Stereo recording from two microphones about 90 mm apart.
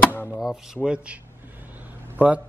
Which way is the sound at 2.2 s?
15° right (ahead or behind).